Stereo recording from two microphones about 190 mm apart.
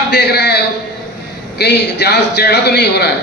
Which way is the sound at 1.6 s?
60° left (ahead or behind).